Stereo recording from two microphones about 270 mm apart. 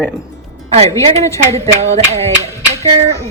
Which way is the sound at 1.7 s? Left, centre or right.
Right.